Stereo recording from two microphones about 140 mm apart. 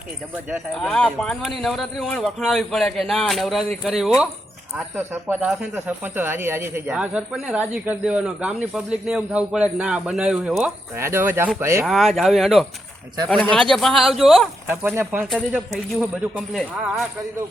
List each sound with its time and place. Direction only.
0.7 s speech: 5° left (ahead or behind)
4.9 s speech: 15° right (ahead or behind)
10.9 s speech: 20° right (ahead or behind)
11.9 s a man's voice: centre (ahead or behind)
14.7 s speech: 15° right (ahead or behind)
15.7 s speech: centre (ahead or behind)